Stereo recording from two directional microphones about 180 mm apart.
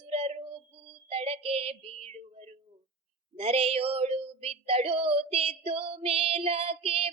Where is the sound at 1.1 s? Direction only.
35° right (ahead or behind).